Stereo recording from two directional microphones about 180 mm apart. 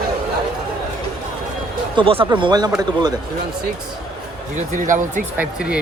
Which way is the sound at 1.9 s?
30° right (ahead or behind).